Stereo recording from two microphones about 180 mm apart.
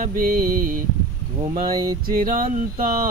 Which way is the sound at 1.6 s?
20° right (ahead or behind).